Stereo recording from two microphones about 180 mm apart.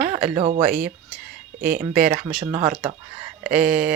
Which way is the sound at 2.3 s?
10° right (ahead or behind).